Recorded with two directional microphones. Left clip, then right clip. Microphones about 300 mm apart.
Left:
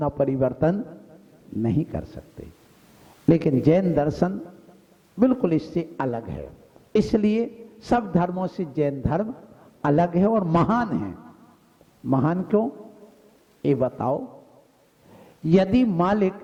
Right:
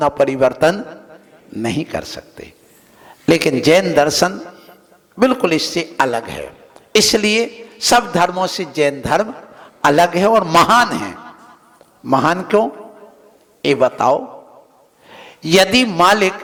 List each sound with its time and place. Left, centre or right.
0.0 s a man's voice: centre
14.2 s a man's voice: centre
15.1 s a man's voice: centre